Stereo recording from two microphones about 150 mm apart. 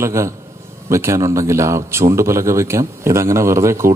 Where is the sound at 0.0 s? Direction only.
20° right (ahead or behind).